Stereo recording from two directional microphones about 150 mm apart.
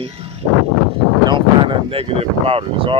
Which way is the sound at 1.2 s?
30° right (ahead or behind).